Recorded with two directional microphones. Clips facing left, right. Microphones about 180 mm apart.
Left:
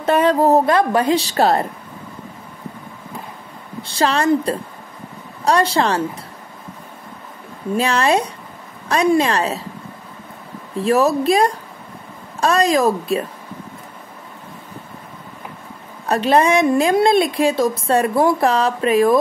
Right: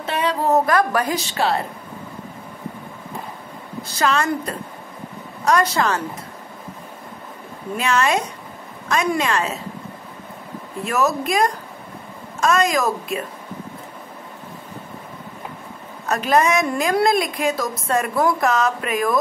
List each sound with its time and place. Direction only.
0.0 s a woman's voice: 45° left (ahead or behind)
3.8 s a woman's voice: 30° left (ahead or behind)
7.7 s a woman's voice: 35° left (ahead or behind)
10.8 s a woman's voice: 30° left (ahead or behind)
16.1 s a woman's voice: 30° left (ahead or behind)